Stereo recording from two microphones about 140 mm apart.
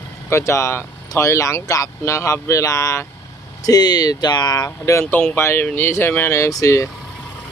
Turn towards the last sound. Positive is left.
turn(degrees=25)  # may be behind; listen again after turning